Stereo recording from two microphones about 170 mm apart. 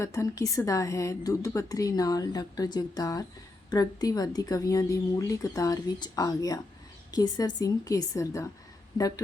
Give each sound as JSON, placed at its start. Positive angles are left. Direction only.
{"t": 0.0, "sound": "a woman's voice", "side_deg": 15}